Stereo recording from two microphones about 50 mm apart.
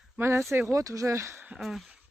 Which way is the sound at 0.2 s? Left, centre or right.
Right.